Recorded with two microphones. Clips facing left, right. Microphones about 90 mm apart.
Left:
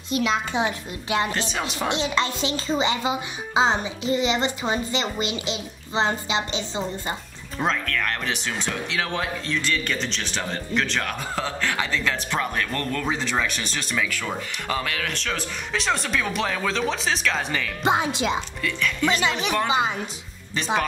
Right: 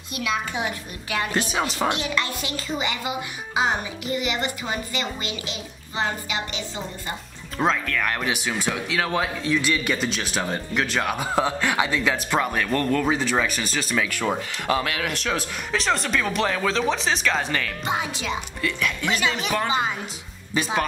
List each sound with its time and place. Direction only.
0.2 s a woman's voice: 25° left (ahead or behind)
7.5 s speech: 5° right (ahead or behind)
13.0 s speech: 5° right (ahead or behind)
13.9 s speech: 15° right (ahead or behind)
15.7 s speech: centre (ahead or behind)
17.8 s a woman's voice: 25° left (ahead or behind)
18.6 s speech: 10° right (ahead or behind)
19.0 s a woman's voice: 25° left (ahead or behind)
19.3 s speech: centre (ahead or behind)